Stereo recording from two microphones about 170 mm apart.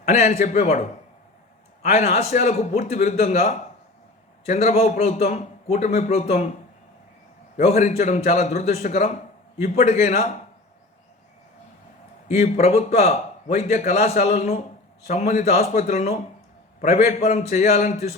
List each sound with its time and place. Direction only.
0.0 s a man's voice: 40° left (ahead or behind)
7.5 s a man's voice: 45° left (ahead or behind)
12.3 s a man's voice: 40° left (ahead or behind)